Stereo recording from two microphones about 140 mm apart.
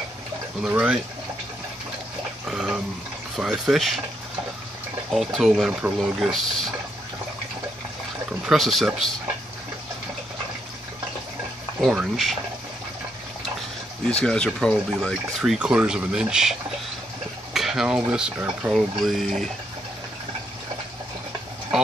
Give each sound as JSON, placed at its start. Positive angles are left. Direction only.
{"t": 0.6, "sound": "speech", "side_deg": -10}
{"t": 2.4, "sound": "a sound", "side_deg": -5}
{"t": 3.3, "sound": "speech", "side_deg": -5}
{"t": 5.1, "sound": "speech", "side_deg": 0}
{"t": 8.3, "sound": "speech", "side_deg": 0}
{"t": 11.8, "sound": "speech", "side_deg": -5}
{"t": 14.1, "sound": "speech", "side_deg": 5}
{"t": 17.6, "sound": "speech", "side_deg": -5}